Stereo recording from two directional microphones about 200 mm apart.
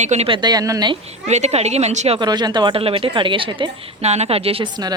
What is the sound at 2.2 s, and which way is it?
A woman's voice, 20° right (ahead or behind).